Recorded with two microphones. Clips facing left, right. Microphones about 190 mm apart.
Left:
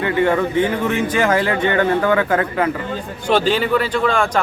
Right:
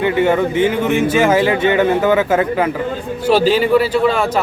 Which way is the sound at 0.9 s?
10° right (ahead or behind).